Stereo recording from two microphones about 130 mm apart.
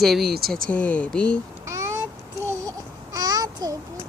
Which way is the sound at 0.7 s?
10° left (ahead or behind).